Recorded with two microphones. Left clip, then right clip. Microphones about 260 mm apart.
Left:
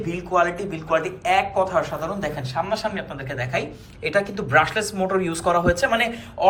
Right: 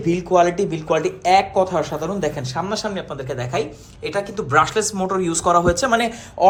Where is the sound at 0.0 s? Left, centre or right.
Right.